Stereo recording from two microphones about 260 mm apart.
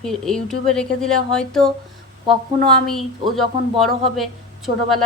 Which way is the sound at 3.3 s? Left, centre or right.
Centre.